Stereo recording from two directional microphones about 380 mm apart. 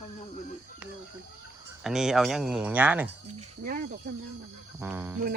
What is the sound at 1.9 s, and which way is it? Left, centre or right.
Speech, centre.